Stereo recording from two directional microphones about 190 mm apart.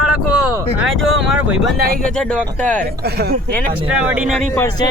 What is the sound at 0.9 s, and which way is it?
Speech, 90° right.